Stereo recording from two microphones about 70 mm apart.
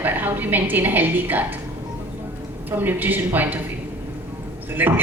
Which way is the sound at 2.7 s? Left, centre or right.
Right.